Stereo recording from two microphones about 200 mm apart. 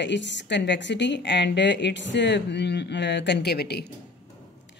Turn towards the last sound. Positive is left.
turn(degrees=55)  # may be behind; listen again after turning